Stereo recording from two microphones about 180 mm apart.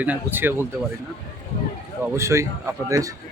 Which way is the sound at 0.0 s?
10° right (ahead or behind).